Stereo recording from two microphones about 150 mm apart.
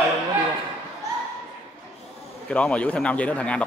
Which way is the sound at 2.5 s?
10° left (ahead or behind).